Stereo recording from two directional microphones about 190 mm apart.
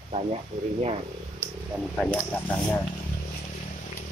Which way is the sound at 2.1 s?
15° left (ahead or behind).